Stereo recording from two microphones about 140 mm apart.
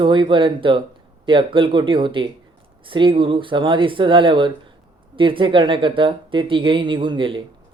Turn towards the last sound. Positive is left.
turn(degrees=-35)  # may be behind; listen again after turning